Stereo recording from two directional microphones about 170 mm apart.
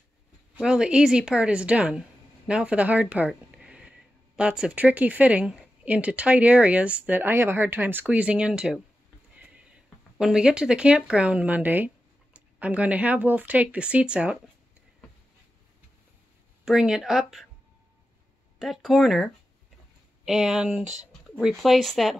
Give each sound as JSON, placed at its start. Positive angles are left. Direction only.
{"t": 0.6, "sound": "speech", "side_deg": -5}
{"t": 16.6, "sound": "speech", "side_deg": -5}
{"t": 18.6, "sound": "speech", "side_deg": 0}